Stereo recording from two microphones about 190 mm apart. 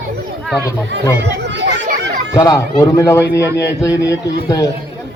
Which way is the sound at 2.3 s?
15° left (ahead or behind).